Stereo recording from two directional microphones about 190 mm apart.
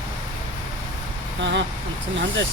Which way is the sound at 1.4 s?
70° right (ahead or behind).